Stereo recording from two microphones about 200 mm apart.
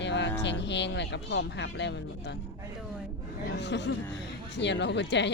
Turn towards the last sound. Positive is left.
turn(degrees=60)  # may be behind; listen again after turning